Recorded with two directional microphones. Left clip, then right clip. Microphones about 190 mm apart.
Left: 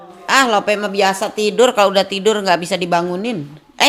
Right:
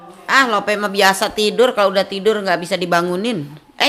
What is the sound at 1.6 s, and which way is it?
Speech, 10° left (ahead or behind).